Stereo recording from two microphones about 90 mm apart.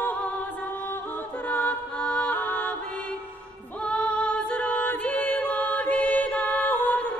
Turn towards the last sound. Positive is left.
turn(degrees=20)  # may be behind; listen again after turning